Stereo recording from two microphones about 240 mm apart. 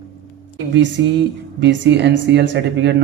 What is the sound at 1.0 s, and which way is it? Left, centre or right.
A man's voice, right.